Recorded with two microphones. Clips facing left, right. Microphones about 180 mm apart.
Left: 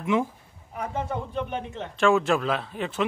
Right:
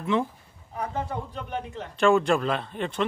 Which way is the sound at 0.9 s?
25° left (ahead or behind).